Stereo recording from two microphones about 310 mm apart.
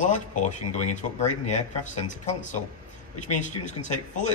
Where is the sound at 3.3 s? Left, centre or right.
Left.